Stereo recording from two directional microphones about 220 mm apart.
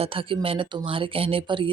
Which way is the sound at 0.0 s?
25° right (ahead or behind).